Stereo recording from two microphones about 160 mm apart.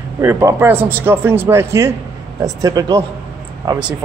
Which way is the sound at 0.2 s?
15° right (ahead or behind).